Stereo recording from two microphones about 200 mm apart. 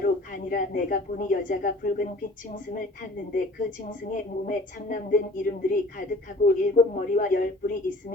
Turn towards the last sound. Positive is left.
turn(degrees=45)  # may be behind; listen again after turning